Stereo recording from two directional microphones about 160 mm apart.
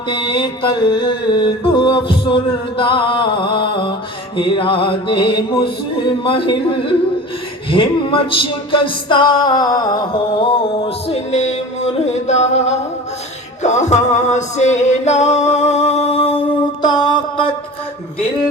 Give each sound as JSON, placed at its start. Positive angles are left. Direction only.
{"t": 0.1, "sound": "mantra", "side_deg": 30}
{"t": 4.4, "sound": "music", "side_deg": 30}
{"t": 16.8, "sound": "a sound", "side_deg": 25}